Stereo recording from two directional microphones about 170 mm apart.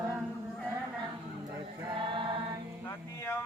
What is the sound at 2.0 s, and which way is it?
Music, 30° right (ahead or behind).